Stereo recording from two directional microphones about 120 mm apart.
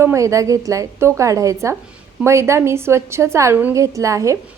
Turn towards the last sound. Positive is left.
turn(degrees=-25)  # may be behind; listen again after turning